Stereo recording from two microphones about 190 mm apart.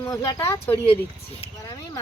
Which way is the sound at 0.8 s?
30° left (ahead or behind).